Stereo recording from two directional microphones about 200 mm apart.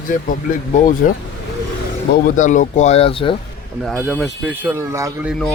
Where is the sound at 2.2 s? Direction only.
40° left (ahead or behind).